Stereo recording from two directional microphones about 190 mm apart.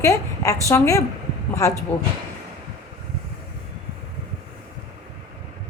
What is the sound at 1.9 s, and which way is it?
Speech, 30° left (ahead or behind).